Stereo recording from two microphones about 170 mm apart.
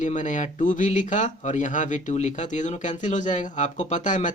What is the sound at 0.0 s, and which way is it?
Speech, 45° left (ahead or behind).